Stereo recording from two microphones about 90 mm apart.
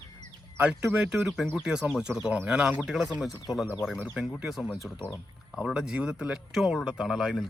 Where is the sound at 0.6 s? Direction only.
15° right (ahead or behind).